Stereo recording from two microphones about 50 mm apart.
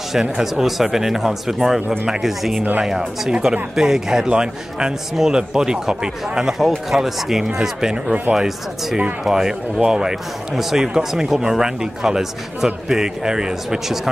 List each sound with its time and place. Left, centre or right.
0.1 s speech: centre
3.0 s speech: centre